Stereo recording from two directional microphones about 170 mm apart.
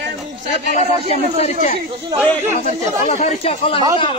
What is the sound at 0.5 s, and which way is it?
Speech, 45° left (ahead or behind).